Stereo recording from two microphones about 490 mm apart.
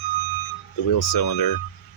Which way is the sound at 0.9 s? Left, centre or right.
Left.